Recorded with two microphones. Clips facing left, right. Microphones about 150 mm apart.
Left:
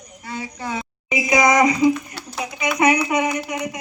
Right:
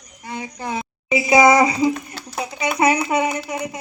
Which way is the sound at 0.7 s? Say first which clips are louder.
Right 5 dB; 30° right (ahead or behind).